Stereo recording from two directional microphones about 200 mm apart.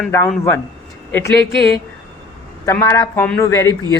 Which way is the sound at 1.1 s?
10° left (ahead or behind).